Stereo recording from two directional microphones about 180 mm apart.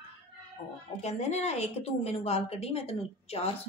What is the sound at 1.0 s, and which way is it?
A woman's voice, 35° left (ahead or behind).